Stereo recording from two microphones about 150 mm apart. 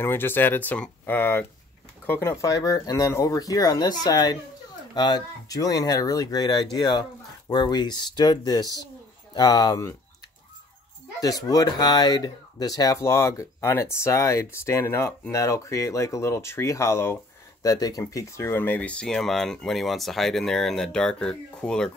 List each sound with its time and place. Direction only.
0.0 s speech: 15° left (ahead or behind)
11.1 s speech: 25° left (ahead or behind); by 21.9 s 5° left (ahead or behind)